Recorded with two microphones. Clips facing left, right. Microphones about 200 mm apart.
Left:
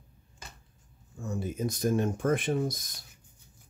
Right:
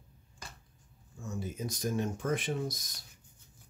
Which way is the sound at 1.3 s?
55° left (ahead or behind).